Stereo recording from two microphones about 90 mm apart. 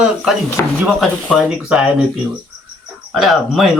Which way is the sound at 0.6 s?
20° left (ahead or behind).